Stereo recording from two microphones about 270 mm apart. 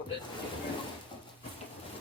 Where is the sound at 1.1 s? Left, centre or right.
Centre.